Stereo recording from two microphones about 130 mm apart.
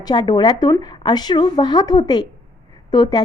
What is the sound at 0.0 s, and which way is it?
A woman's voice, 35° left (ahead or behind).